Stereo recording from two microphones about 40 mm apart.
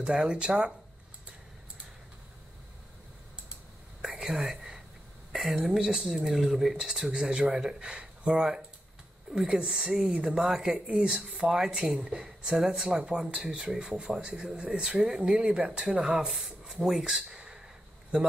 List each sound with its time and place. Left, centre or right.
0.0 s speech: right
4.2 s whispering: centre
5.3 s speech: centre
8.4 s a woman's voice: centre
15.3 s speech: right
16.3 s speech: centre; by 18.3 s right